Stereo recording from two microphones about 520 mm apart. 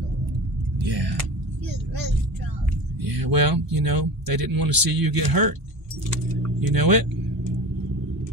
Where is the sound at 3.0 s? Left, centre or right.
Right.